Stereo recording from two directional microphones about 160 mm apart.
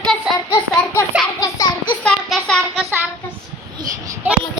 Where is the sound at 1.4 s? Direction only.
25° left (ahead or behind).